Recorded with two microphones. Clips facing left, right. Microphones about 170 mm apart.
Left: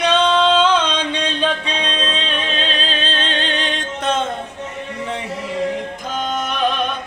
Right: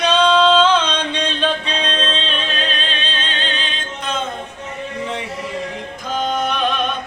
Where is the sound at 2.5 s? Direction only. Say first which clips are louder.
Left 2 dB; 30° left (ahead or behind).